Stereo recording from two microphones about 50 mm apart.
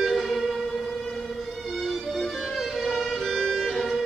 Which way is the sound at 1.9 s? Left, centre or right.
Centre.